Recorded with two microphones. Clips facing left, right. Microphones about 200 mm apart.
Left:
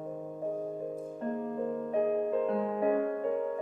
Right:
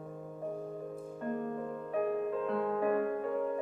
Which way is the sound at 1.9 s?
25° left (ahead or behind).